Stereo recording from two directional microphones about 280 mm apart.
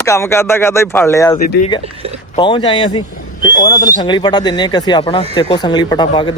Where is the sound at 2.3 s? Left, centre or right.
Centre.